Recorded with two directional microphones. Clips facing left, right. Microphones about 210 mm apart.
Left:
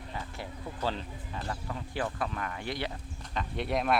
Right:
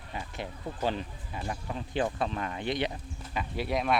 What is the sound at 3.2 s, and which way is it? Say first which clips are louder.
Speech: right 1 dB; 5° right (ahead or behind).